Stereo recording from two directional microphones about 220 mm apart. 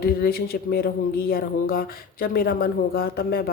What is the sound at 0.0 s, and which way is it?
A woman's voice, 45° left (ahead or behind).